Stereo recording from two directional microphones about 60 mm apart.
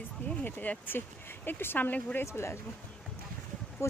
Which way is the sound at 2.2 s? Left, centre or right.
Left.